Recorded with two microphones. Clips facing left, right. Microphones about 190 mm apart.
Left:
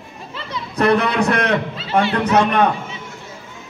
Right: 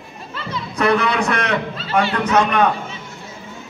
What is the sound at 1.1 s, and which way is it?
A man's voice, 35° left (ahead or behind).